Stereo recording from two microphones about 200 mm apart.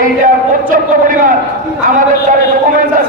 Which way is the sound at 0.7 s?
40° right (ahead or behind).